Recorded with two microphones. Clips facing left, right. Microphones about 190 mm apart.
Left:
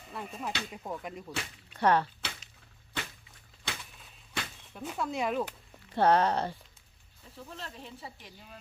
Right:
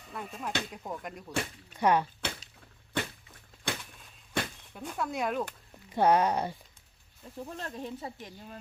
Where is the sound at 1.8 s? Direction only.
10° right (ahead or behind).